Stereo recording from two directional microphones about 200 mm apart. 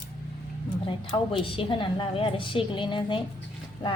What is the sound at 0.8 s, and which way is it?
A woman's voice, 25° left (ahead or behind).